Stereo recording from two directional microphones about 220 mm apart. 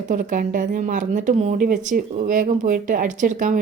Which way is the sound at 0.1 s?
40° right (ahead or behind).